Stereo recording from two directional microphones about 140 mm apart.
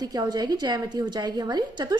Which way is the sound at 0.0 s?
30° right (ahead or behind).